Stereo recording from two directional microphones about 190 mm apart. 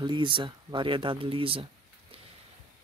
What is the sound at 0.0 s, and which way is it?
Speech, 25° right (ahead or behind).